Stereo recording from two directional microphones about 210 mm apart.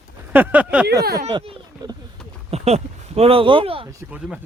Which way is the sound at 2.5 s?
30° right (ahead or behind).